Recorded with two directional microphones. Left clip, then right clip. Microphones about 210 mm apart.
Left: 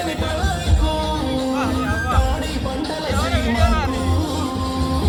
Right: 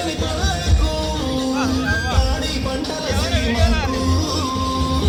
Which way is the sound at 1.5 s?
20° right (ahead or behind).